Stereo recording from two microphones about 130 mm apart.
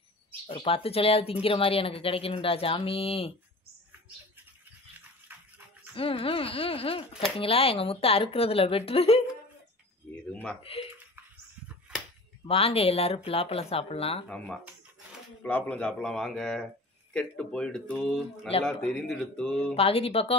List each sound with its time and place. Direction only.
0.5 s speech: 45° left (ahead or behind)
5.3 s music: 15° right (ahead or behind)
5.9 s speech: 45° left (ahead or behind)
10.2 s speech: 10° left (ahead or behind)
10.6 s speech: 45° left (ahead or behind)
12.4 s speech: 50° left (ahead or behind)
14.2 s speech: 10° left (ahead or behind)
19.7 s speech: 50° left (ahead or behind)